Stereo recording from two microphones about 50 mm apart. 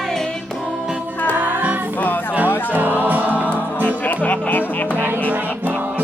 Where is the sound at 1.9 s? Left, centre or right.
Left.